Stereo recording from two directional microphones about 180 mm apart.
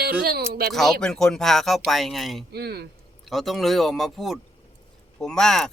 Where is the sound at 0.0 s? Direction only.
60° right (ahead or behind).